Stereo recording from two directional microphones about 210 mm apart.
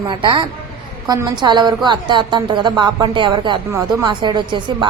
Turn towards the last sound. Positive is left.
turn(degrees=-20)  # may be behind; listen again after turning